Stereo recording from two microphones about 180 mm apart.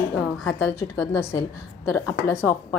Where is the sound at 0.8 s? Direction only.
15° left (ahead or behind).